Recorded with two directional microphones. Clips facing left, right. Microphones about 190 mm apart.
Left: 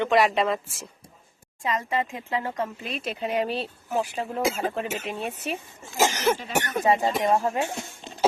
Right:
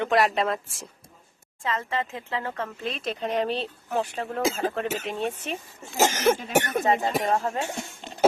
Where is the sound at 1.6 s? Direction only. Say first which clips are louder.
Left 2 dB; 10° left (ahead or behind).